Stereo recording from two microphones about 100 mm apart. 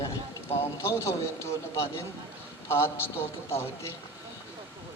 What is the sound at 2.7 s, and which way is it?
Speech, 25° left (ahead or behind).